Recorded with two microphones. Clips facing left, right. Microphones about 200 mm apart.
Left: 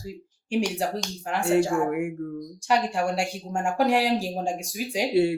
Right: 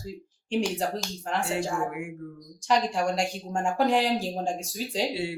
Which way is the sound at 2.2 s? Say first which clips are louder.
Left 8 dB; 55° left (ahead or behind).